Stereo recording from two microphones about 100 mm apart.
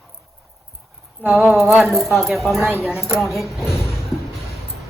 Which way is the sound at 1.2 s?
20° right (ahead or behind).